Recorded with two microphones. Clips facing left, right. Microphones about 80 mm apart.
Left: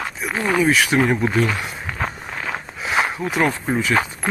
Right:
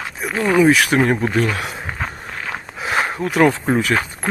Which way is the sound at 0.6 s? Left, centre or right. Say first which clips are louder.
Right 4 dB; right.